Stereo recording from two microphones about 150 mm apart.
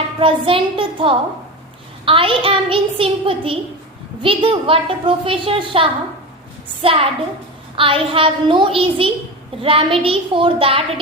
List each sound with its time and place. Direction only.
0.2 s a woman's voice: 35° right (ahead or behind)